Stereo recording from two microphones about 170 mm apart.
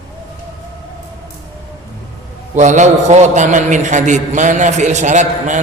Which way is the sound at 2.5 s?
45° right (ahead or behind).